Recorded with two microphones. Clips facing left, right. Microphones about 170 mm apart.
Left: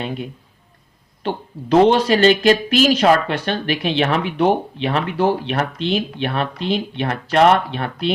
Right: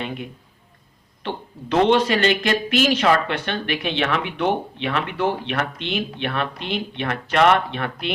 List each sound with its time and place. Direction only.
1.7 s speech: 35° left (ahead or behind)